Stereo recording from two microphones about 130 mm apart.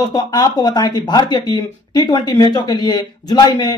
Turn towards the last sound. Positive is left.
turn(degrees=30)  # may be behind; listen again after turning